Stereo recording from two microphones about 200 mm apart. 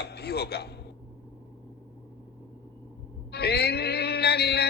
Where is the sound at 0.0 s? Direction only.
55° left (ahead or behind).